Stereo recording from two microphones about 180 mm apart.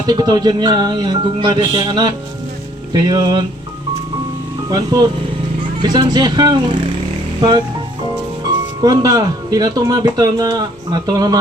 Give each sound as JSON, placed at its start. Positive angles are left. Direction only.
{"t": 0.0, "sound": "speech", "side_deg": -25}
{"t": 4.7, "sound": "speech", "side_deg": -20}
{"t": 8.4, "sound": "speech", "side_deg": -20}